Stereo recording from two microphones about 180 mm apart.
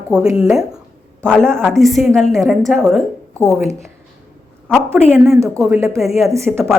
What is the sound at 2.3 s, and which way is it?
Speech, 15° right (ahead or behind).